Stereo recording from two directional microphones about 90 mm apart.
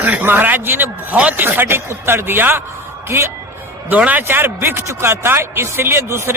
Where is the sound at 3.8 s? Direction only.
15° right (ahead or behind).